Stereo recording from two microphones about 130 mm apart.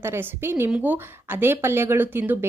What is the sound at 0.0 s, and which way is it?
Speech, 15° right (ahead or behind).